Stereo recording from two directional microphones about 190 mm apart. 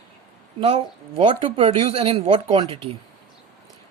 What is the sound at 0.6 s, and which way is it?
Speech, 25° right (ahead or behind).